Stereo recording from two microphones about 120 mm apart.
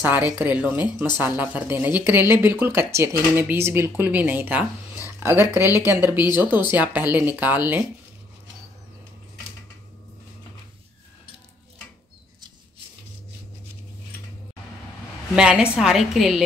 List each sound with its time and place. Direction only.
0.0 s speech: 15° right (ahead or behind)
15.3 s a woman's voice: 5° right (ahead or behind)